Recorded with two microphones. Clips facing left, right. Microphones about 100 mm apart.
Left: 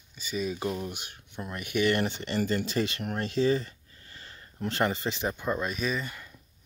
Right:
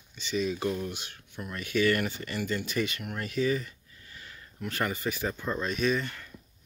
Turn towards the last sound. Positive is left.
turn(degrees=10)  # may be behind; listen again after turning